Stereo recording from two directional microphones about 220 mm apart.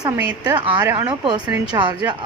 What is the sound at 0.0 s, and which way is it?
A woman's voice, 15° right (ahead or behind).